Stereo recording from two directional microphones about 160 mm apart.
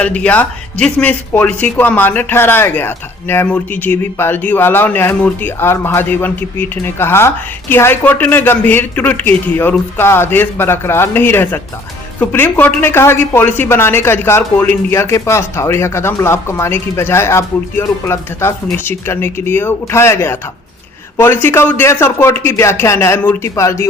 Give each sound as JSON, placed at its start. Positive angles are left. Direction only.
{"t": 0.0, "sound": "speech", "side_deg": 10}